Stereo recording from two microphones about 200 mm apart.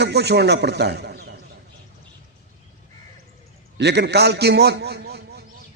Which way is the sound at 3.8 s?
55° right (ahead or behind).